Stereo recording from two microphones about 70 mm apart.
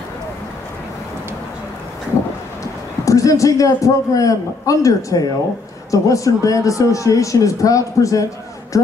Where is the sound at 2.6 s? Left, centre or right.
Left.